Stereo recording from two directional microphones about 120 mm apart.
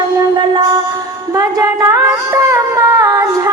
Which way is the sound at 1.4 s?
30° right (ahead or behind).